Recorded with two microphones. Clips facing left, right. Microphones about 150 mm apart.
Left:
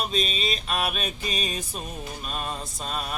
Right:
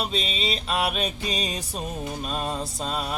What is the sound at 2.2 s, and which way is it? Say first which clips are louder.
Mantra: right 3 dB; 30° right (ahead or behind).